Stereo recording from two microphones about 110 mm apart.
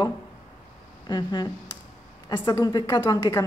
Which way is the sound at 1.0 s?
40° left (ahead or behind).